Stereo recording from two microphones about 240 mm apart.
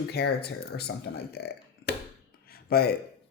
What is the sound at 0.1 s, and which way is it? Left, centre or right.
Speech, left.